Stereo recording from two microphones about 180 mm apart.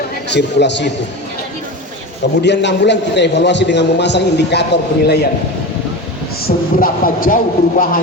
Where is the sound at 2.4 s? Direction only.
75° left (ahead or behind).